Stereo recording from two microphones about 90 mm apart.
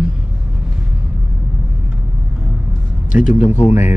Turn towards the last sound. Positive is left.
turn(degrees=-20)  # may be behind; listen again after turning